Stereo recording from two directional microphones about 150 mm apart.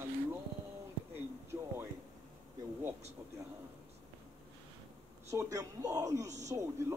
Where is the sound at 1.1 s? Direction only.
15° right (ahead or behind).